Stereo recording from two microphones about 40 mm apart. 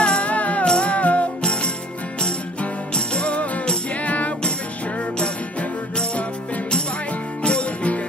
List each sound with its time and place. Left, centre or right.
0.0 s music: left
1.4 s music: left
2.9 s music: left
7.4 s music: left